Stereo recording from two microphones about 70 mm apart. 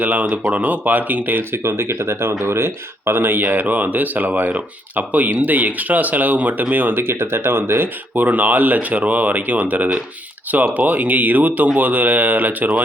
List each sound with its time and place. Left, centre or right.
0.0 s speech: right